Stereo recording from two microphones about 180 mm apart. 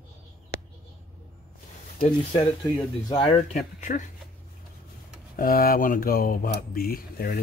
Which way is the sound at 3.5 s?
40° left (ahead or behind).